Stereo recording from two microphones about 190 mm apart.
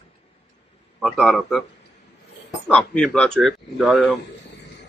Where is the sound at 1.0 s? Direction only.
Centre (ahead or behind).